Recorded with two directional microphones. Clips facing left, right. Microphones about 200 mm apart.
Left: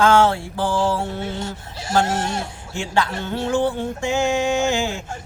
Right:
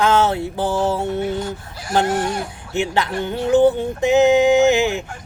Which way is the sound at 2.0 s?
25° left (ahead or behind).